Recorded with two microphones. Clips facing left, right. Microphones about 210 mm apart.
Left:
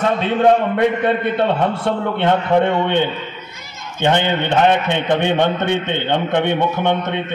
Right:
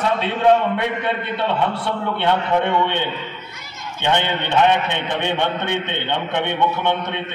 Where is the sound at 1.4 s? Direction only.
45° left (ahead or behind).